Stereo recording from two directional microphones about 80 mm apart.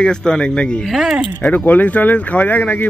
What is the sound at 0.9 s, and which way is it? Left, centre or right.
Speech, centre.